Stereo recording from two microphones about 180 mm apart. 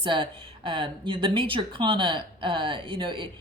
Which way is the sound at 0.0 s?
25° right (ahead or behind).